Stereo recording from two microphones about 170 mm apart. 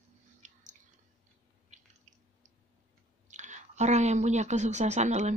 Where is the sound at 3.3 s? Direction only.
45° right (ahead or behind).